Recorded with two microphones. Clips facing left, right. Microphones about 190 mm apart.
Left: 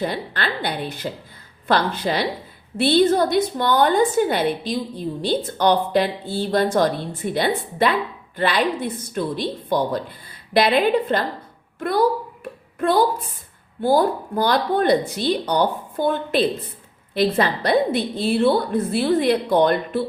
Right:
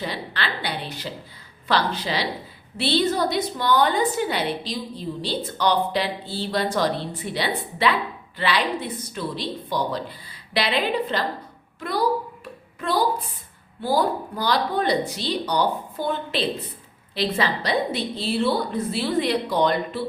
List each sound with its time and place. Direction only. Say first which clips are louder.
0.0 s a woman's voice: left 4 dB; 50° left (ahead or behind)
13.8 s a woman's voice: left 4 dB; 50° left (ahead or behind)